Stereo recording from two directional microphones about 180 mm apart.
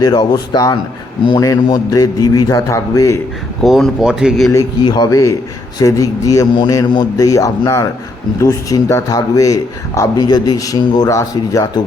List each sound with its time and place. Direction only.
0.0 s speech: 20° left (ahead or behind)
3.6 s speech: centre (ahead or behind)
4.5 s a man's voice: 25° left (ahead or behind)